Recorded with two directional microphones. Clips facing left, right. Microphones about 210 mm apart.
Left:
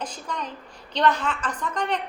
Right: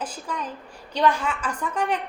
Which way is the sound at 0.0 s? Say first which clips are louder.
Right 1 dB; 5° right (ahead or behind).